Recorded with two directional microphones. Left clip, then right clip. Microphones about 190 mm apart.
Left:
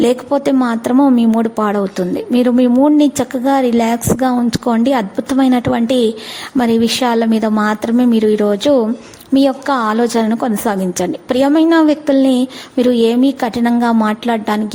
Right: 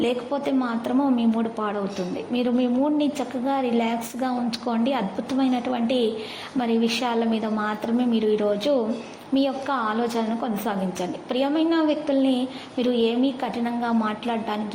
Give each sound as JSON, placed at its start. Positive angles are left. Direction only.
{"t": 0.0, "sound": "a woman's voice", "side_deg": 45}